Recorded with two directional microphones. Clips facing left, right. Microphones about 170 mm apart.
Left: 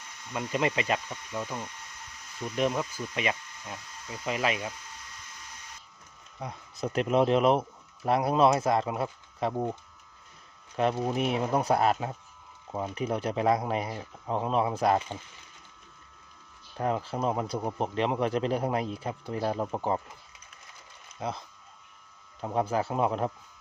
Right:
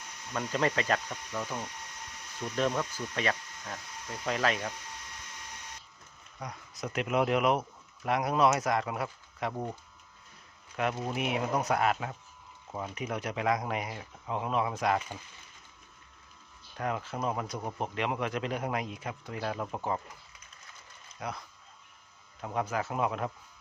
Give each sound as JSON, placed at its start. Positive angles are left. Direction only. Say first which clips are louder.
{"t": 0.3, "sound": "speech", "louder": "left 1 dB", "side_deg": 10}
{"t": 6.4, "sound": "speech", "louder": "left 5 dB", "side_deg": 25}
{"t": 10.8, "sound": "speech", "louder": "left 5 dB", "side_deg": 30}
{"t": 16.7, "sound": "speech", "louder": "left 4 dB", "side_deg": 30}
{"t": 21.2, "sound": "speech", "louder": "left 4 dB", "side_deg": 25}